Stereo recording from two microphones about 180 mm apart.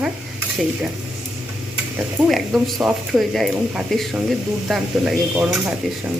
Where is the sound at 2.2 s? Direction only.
Centre (ahead or behind).